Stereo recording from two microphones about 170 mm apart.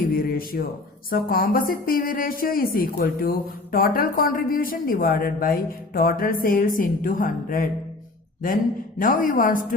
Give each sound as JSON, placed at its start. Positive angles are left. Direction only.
{"t": 0.2, "sound": "a woman's voice", "side_deg": 60}
{"t": 9.0, "sound": "a woman's voice", "side_deg": 55}